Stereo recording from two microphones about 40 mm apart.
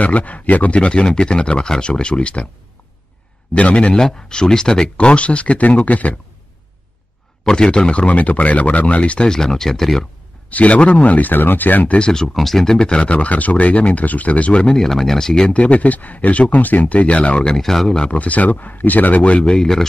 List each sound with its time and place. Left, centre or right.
0.0 s speech: left
3.5 s speech: left
3.9 s speech: centre
4.9 s speech: left
7.4 s speech: left
9.2 s speech: centre
10.5 s speech: left
12.4 s speech: centre; by 14.7 s left
14.7 s speech: centre
15.5 s speech: left
17.5 s speech: centre
18.1 s speech: left
19.4 s speech: centre